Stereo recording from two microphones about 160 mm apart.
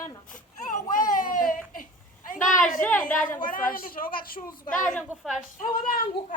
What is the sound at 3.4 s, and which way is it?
A woman's voice, 60° left (ahead or behind).